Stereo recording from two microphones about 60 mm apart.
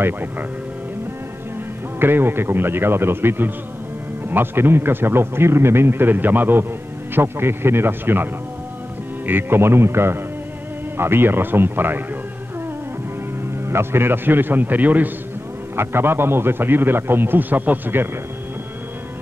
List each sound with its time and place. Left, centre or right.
0.0 s speech: right
2.0 s speech: right
13.7 s speech: right
15.7 s speech: right